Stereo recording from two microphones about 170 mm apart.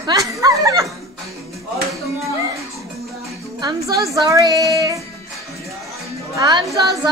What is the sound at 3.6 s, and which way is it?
Speech, 20° right (ahead or behind).